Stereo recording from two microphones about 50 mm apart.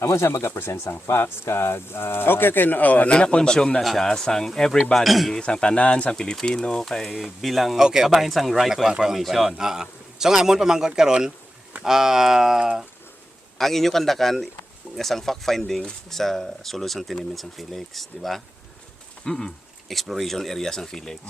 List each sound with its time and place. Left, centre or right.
0.0 s speech: left
3.1 s speech: centre
5.0 s speech: centre
5.3 s speech: centre
7.8 s a man's voice: centre
9.1 s a man's voice: centre
13.6 s speech: centre
19.2 s a sound: centre
20.0 s speech: centre